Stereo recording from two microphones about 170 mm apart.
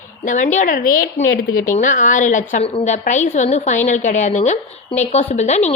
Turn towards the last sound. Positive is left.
turn(degrees=40)  # may be behind; listen again after turning